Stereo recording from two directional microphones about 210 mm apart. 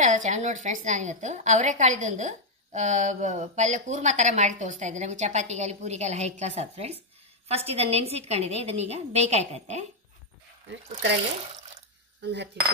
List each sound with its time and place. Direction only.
0.0 s a woman's voice: 35° right (ahead or behind)
10.7 s speech: 60° right (ahead or behind)
12.2 s cutlery: 55° right (ahead or behind)